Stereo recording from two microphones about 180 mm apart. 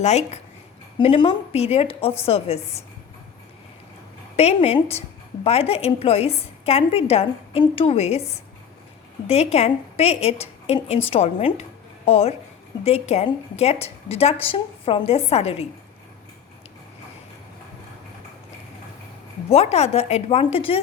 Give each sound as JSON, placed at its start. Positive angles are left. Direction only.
{"t": 0.0, "sound": "a woman's voice", "side_deg": 40}
{"t": 0.9, "sound": "a woman's voice", "side_deg": 25}
{"t": 4.4, "sound": "a woman's voice", "side_deg": 35}
{"t": 9.2, "sound": "a woman's voice", "side_deg": 35}
{"t": 19.5, "sound": "a woman's voice", "side_deg": 35}